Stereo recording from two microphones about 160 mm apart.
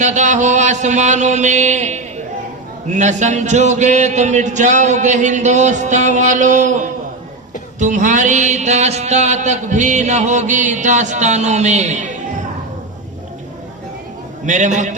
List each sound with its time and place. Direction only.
0.0 s mantra: 50° right (ahead or behind)
2.9 s music: 50° right (ahead or behind)
14.4 s music: 50° right (ahead or behind)